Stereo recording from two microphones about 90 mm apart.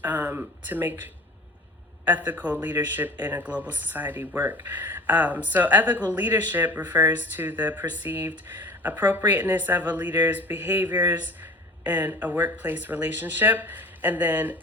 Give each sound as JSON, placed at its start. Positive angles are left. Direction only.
{"t": 0.0, "sound": "speech", "side_deg": -20}
{"t": 2.0, "sound": "speech", "side_deg": -20}